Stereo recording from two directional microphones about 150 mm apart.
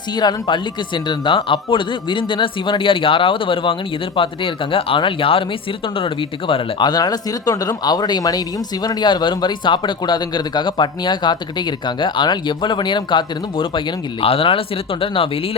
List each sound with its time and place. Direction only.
0.2 s speech: 30° left (ahead or behind)